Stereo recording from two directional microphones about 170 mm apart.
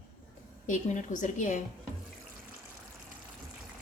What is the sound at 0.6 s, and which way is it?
Speech, 45° left (ahead or behind).